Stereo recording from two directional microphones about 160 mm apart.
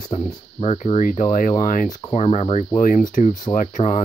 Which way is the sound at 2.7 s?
55° left (ahead or behind).